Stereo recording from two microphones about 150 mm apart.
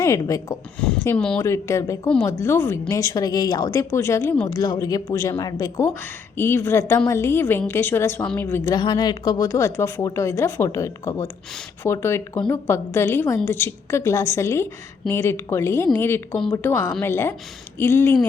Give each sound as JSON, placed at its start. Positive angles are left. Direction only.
{"t": 0.0, "sound": "speech", "side_deg": 20}
{"t": 1.0, "sound": "a woman's voice", "side_deg": 10}
{"t": 1.4, "sound": "a woman's voice", "side_deg": 20}
{"t": 8.7, "sound": "a woman's voice", "side_deg": 30}